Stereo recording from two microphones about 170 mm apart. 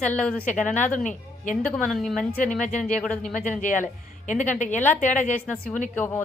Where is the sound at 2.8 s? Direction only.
5° left (ahead or behind).